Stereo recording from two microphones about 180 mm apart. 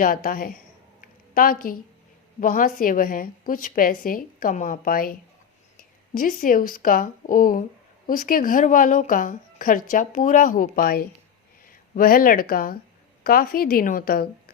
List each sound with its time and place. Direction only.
0.0 s speech: 50° left (ahead or behind)
1.0 s a sound: 50° left (ahead or behind)
2.4 s speech: 50° left (ahead or behind)
6.1 s speech: 45° left (ahead or behind)